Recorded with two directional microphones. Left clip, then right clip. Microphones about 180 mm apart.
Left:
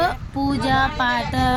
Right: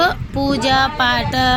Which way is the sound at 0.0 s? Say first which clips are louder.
Right 5 dB; 10° right (ahead or behind).